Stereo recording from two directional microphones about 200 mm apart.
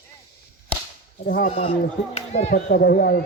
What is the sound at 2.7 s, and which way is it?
Speech, 50° left (ahead or behind).